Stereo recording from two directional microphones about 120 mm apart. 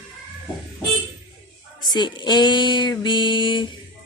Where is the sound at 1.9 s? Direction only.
40° left (ahead or behind).